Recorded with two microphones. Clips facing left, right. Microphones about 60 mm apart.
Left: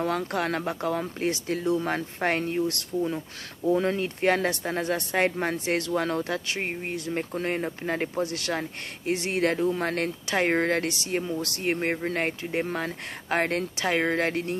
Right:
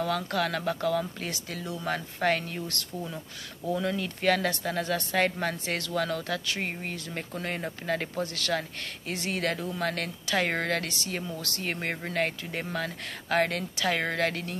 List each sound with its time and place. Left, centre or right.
0.0 s speech: left
2.9 s speech: centre
3.7 s speech: left
6.7 s speech: centre